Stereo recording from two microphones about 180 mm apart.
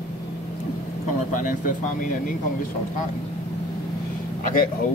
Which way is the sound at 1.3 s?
45° left (ahead or behind).